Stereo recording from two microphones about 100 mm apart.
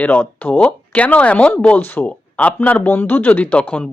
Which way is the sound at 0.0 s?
15° left (ahead or behind).